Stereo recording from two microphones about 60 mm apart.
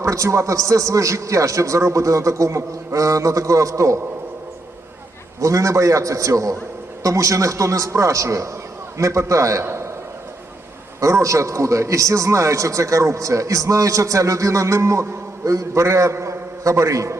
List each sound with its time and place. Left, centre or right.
0.0 s a man's voice: right
5.4 s a man's voice: right
11.0 s a man's voice: right
16.6 s a man's voice: right